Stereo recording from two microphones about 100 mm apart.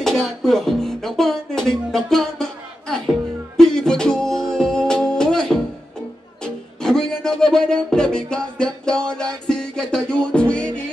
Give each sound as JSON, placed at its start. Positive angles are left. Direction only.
{"t": 0.0, "sound": "music", "side_deg": 5}